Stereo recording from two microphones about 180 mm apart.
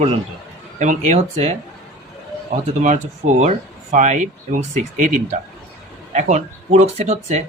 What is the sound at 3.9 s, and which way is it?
Speech, 45° right (ahead or behind).